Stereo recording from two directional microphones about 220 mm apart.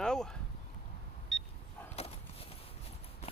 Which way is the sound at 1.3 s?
Centre (ahead or behind).